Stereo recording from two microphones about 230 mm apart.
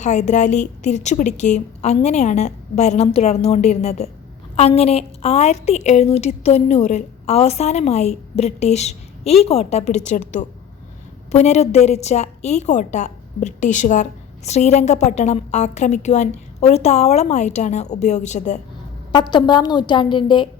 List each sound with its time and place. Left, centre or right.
0.0 s a woman's voice: left
19.1 s a woman's voice: centre